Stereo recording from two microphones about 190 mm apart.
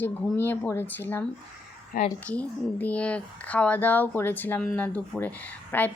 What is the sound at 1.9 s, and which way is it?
Speech, 50° left (ahead or behind).